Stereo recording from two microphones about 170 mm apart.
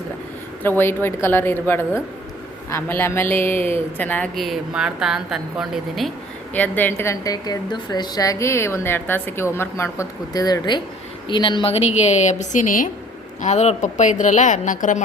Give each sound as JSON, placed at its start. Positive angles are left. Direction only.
{"t": 0.6, "sound": "a woman's voice", "side_deg": 10}
{"t": 6.5, "sound": "a woman's voice", "side_deg": 10}